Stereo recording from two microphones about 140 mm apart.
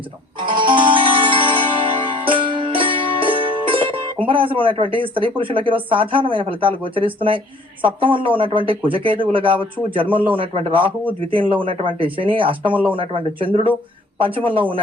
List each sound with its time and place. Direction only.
0.4 s music: 35° right (ahead or behind)
4.3 s speech: 40° right (ahead or behind)
12.7 s speech: 10° right (ahead or behind)
13.0 s speech: 40° right (ahead or behind)